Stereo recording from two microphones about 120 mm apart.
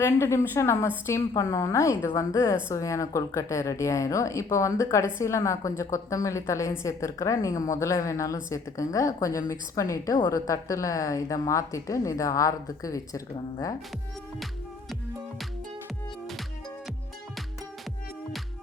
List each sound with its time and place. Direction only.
0.0 s a woman's voice: 20° left (ahead or behind)